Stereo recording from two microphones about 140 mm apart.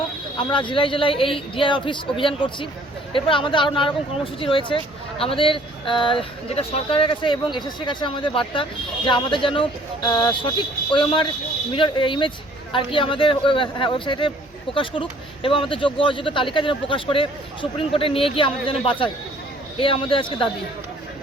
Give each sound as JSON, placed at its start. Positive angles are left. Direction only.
{"t": 0.3, "sound": "speech", "side_deg": 35}